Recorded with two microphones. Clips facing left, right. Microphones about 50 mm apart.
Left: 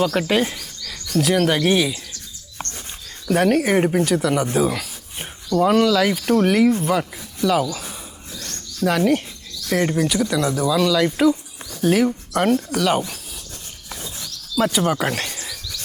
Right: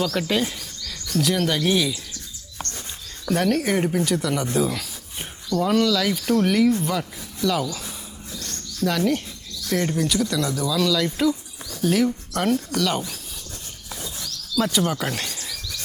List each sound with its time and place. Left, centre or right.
0.0 s speech: left
1.1 s speech: left
3.3 s speech: left
4.0 s speech: centre
4.5 s a sound: centre
5.6 s speech: left
7.0 s speech: centre
8.4 s bird: left
9.6 s speech: left
10.8 s speech: centre
14.5 s speech: left